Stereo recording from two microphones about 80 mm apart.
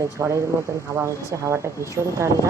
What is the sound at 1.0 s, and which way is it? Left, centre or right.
Speech, right.